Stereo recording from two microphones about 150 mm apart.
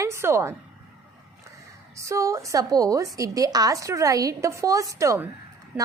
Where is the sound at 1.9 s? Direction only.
20° right (ahead or behind).